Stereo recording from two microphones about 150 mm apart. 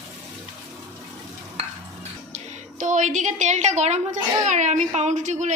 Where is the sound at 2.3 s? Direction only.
55° right (ahead or behind).